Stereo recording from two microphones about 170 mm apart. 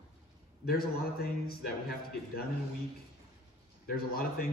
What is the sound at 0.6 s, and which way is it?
Speech, 65° left (ahead or behind).